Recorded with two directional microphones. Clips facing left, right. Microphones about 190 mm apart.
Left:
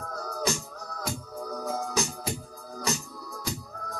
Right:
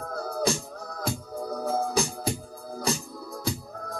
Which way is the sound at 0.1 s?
30° right (ahead or behind).